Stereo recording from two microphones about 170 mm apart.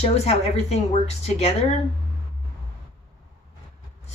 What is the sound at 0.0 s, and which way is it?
Speech, 35° left (ahead or behind).